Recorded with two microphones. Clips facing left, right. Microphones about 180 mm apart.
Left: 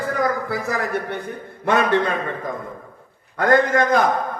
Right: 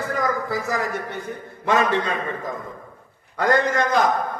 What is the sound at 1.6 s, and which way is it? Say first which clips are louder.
Speech: left 2 dB; 60° left (ahead or behind).